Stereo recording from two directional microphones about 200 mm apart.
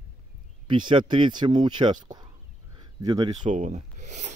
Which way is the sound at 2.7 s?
20° right (ahead or behind).